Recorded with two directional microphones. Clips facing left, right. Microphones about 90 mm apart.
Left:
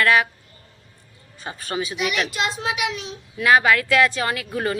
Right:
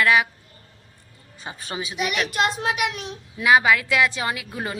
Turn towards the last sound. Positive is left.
turn(degrees=-10)  # may be behind; listen again after turning